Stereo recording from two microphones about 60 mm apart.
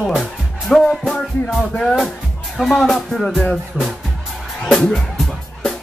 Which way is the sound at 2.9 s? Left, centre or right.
Centre.